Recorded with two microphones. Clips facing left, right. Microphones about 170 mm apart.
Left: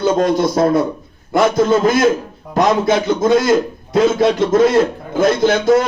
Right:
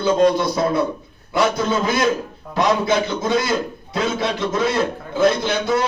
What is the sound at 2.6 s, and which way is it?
A man's voice, 45° left (ahead or behind).